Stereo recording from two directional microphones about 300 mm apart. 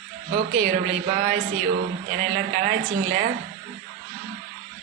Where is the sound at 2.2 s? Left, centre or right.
Right.